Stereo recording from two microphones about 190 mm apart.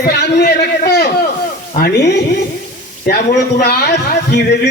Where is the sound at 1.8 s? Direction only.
60° left (ahead or behind).